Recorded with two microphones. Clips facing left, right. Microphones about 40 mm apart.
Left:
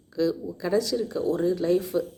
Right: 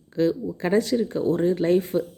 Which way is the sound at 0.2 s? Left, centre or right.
Right.